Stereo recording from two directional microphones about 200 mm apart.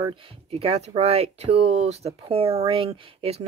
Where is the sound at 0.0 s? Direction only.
25° right (ahead or behind).